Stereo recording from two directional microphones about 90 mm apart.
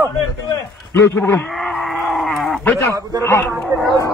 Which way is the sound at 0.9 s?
30° left (ahead or behind).